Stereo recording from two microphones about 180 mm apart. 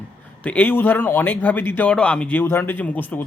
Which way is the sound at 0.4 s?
10° left (ahead or behind).